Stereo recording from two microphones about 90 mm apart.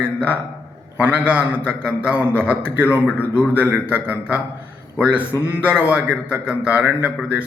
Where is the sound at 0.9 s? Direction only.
15° right (ahead or behind).